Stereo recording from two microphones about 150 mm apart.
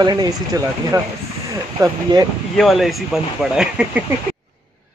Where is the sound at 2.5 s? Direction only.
Centre (ahead or behind).